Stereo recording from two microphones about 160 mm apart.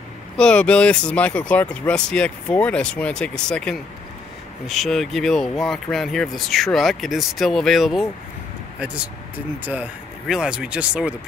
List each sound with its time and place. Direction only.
0.4 s speech: 5° left (ahead or behind)